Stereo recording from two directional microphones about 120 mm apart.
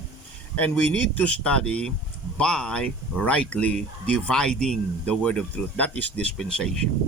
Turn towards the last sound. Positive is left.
turn(degrees=5)  # may be behind; listen again after turning